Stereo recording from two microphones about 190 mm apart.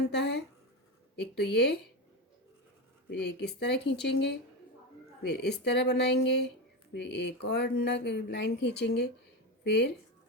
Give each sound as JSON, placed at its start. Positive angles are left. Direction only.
{"t": 0.1, "sound": "speech", "side_deg": 65}
{"t": 3.1, "sound": "speech", "side_deg": 60}